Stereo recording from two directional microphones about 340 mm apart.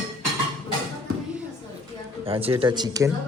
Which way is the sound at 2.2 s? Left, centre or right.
Centre.